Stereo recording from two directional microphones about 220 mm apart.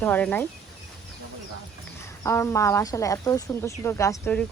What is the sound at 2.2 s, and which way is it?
Speech, 10° left (ahead or behind).